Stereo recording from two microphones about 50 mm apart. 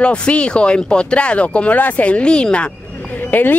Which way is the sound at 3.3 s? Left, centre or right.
Left.